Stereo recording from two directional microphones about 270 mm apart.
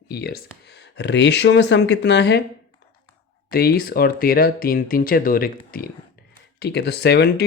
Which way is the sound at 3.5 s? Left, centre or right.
Left.